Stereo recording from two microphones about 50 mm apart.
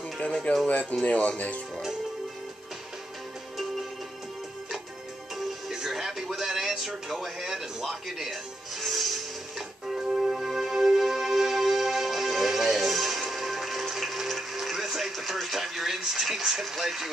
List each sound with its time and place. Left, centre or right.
0.2 s speech: left
0.7 s speech: left
5.7 s music: centre